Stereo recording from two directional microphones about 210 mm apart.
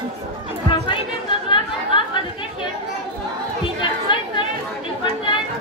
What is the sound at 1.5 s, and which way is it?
Chatter, 25° left (ahead or behind).